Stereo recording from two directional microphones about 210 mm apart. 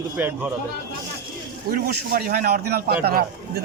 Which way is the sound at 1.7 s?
45° right (ahead or behind).